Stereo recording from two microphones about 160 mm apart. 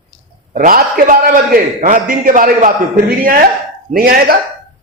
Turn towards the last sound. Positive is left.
turn(degrees=-65)  # may be behind; listen again after turning